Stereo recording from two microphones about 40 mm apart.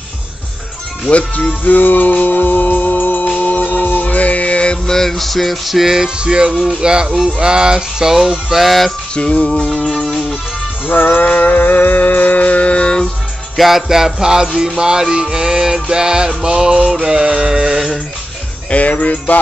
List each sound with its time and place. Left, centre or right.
1.1 s music: left
4.8 s music: centre
8.5 s a sound: centre
9.1 s music: left
9.5 s music: centre
10.9 s a sound: left
13.6 s music: centre
18.7 s music: left